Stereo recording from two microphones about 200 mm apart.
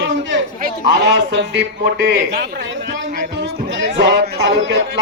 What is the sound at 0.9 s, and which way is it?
A man's voice, 60° right (ahead or behind).